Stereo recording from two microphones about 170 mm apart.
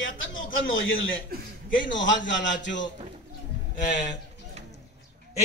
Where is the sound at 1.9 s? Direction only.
90° left.